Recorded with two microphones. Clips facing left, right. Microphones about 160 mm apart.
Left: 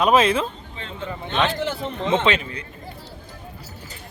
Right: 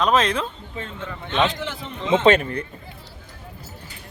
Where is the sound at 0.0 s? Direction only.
10° left (ahead or behind).